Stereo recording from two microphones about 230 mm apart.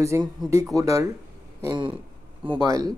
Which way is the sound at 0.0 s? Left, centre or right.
Centre.